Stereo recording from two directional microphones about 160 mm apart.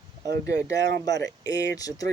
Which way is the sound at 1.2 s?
20° left (ahead or behind).